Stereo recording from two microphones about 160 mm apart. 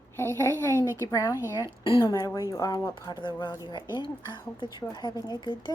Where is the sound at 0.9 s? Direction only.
15° right (ahead or behind).